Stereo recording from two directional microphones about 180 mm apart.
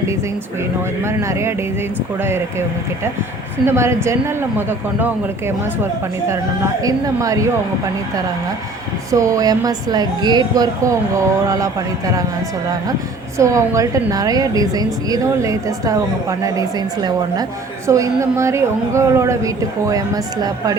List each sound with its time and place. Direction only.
1.0 s a woman's voice: 15° right (ahead or behind)
9.1 s speech: 20° right (ahead or behind)
13.4 s a woman's voice: 15° right (ahead or behind)